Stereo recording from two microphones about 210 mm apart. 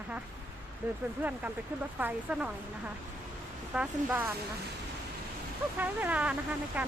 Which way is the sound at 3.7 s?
5° right (ahead or behind).